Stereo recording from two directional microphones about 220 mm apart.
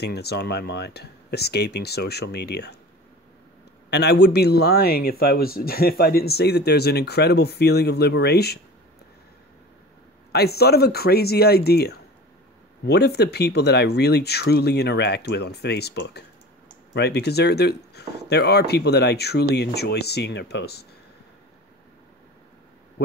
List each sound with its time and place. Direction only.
0.0 s speech: 50° left (ahead or behind)
3.9 s speech: 50° left (ahead or behind)
10.3 s speech: 45° left (ahead or behind)
23.0 s a sound: 50° left (ahead or behind)